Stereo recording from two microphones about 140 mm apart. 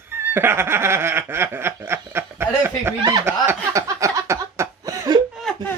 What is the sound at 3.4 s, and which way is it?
Chuckle, 20° right (ahead or behind).